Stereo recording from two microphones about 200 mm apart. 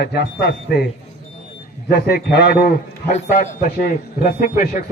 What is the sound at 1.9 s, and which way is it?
Speech, 50° left (ahead or behind).